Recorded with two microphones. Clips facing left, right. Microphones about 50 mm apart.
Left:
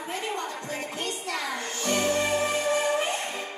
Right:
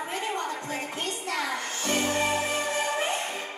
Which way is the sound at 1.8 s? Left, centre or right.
Right.